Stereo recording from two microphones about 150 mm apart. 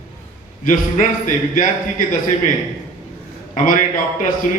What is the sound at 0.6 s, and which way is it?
A man's voice, 60° left (ahead or behind).